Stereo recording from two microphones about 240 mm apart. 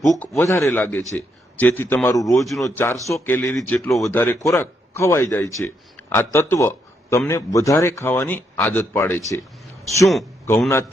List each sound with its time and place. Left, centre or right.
0.1 s a man's voice: centre
10.4 s a man's voice: centre